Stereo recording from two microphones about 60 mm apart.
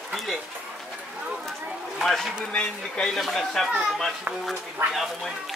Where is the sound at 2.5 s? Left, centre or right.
Centre.